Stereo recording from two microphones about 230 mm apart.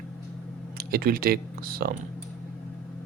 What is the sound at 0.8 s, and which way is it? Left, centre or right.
Speech, right.